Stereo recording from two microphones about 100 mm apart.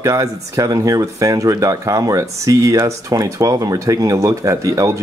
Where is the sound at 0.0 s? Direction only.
35° right (ahead or behind).